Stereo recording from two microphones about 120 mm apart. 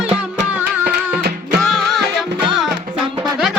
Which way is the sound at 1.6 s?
Centre (ahead or behind).